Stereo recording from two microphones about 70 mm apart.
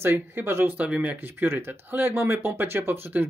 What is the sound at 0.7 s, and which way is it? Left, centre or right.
Speech, right.